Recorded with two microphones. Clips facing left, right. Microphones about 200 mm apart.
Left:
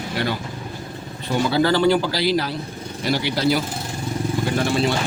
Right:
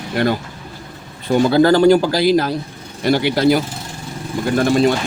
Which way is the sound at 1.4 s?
45° right (ahead or behind).